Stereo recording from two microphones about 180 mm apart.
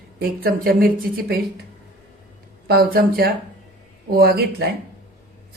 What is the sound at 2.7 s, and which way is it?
Speech, 55° right (ahead or behind).